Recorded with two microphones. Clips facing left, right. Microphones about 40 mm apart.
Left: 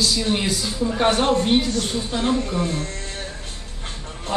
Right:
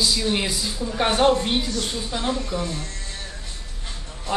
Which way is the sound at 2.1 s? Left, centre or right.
Left.